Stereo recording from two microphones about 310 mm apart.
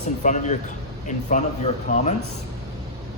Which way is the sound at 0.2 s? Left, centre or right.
Left.